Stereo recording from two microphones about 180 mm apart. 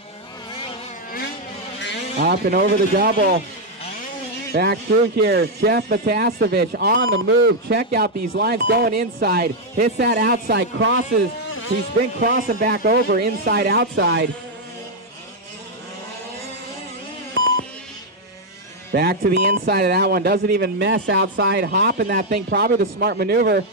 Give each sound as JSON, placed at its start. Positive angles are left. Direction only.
{"t": 2.1, "sound": "speech", "side_deg": -60}
{"t": 4.5, "sound": "speech", "side_deg": -60}
{"t": 12.2, "sound": "speech", "side_deg": -50}
{"t": 12.7, "sound": "speech", "side_deg": -65}
{"t": 18.9, "sound": "speech", "side_deg": -60}